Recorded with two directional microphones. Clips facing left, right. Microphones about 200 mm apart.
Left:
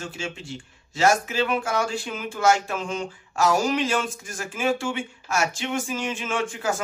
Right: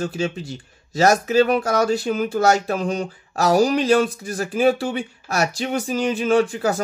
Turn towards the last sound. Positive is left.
turn(degrees=-35)  # may be behind; listen again after turning